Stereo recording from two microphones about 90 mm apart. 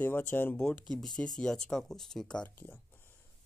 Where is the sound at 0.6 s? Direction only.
10° left (ahead or behind).